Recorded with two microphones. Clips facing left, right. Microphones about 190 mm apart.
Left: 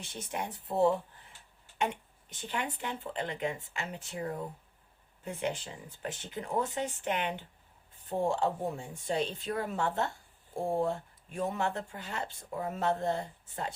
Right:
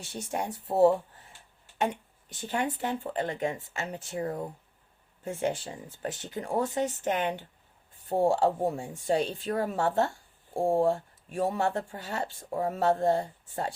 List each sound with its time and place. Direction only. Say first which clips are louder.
0.1 s speech: right 5 dB; 35° right (ahead or behind)
2.3 s speech: right 6 dB; 35° right (ahead or behind)